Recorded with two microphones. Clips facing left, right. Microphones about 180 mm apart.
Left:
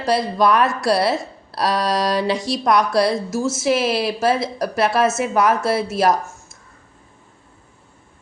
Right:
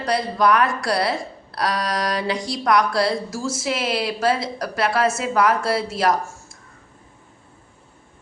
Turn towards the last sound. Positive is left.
turn(degrees=25)  # may be behind; listen again after turning